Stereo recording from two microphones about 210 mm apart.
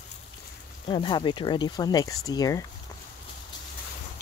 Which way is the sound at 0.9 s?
20° left (ahead or behind).